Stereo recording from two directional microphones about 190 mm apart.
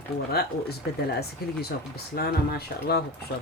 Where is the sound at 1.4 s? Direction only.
55° left (ahead or behind).